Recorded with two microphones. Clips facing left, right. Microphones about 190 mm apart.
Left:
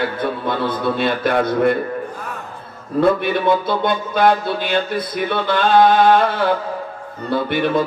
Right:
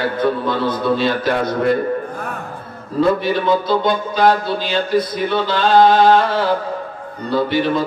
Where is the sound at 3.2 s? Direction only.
55° left (ahead or behind).